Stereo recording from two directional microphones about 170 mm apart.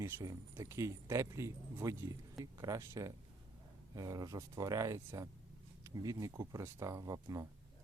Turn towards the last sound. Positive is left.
turn(degrees=-20)  # may be behind; listen again after turning